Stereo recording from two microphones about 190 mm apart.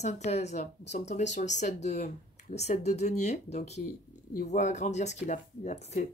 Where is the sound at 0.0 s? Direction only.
35° left (ahead or behind).